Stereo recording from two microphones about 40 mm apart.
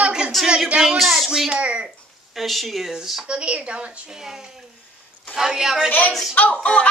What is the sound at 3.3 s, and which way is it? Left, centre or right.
Speech, right.